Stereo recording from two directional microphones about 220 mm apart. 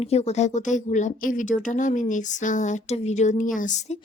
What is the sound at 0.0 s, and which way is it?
A woman's voice, 30° left (ahead or behind).